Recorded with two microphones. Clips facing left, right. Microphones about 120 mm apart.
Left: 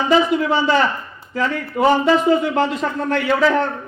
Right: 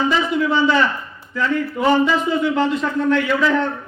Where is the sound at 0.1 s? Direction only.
50° left (ahead or behind).